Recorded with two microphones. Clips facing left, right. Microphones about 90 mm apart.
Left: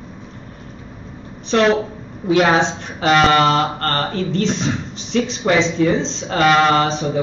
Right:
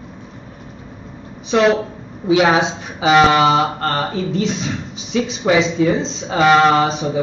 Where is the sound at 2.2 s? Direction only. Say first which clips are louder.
Right 1 dB; 5° right (ahead or behind).